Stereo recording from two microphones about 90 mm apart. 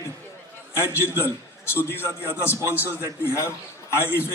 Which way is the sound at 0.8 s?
25° left (ahead or behind).